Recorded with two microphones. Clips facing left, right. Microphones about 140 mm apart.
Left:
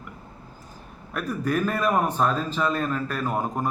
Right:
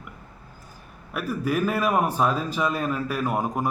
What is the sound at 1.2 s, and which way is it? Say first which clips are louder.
A man's voice: even; 5° right (ahead or behind).